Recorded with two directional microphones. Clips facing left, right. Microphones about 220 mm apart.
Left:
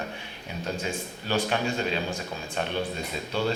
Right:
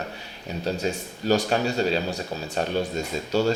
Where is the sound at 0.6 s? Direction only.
40° right (ahead or behind).